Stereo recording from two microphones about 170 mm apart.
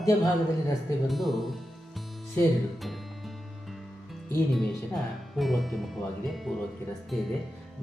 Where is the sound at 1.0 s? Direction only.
Centre (ahead or behind).